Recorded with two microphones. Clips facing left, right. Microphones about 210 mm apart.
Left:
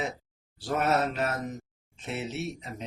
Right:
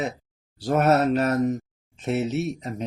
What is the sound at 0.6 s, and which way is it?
Mantra, 40° right (ahead or behind).